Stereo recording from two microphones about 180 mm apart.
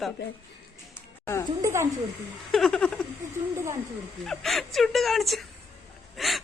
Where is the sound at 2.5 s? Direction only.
Centre (ahead or behind).